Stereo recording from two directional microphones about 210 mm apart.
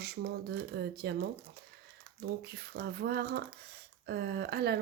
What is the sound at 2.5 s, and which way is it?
Speech, 50° right (ahead or behind).